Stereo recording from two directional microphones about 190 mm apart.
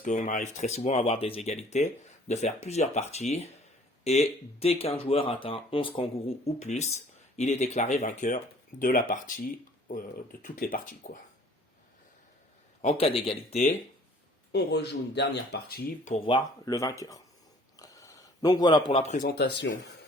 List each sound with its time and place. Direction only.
0.0 s speech: 40° left (ahead or behind)
12.8 s speech: 30° left (ahead or behind)
14.5 s speech: 60° left (ahead or behind)
16.0 s speech: 30° left (ahead or behind); by 19.7 s 65° left (ahead or behind)